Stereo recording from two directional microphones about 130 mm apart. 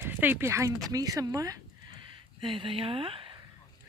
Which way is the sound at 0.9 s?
25° right (ahead or behind).